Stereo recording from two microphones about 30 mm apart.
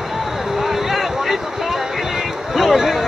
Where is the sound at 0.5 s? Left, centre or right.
Centre.